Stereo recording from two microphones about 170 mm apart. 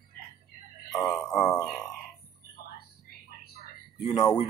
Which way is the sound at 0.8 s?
20° left (ahead or behind).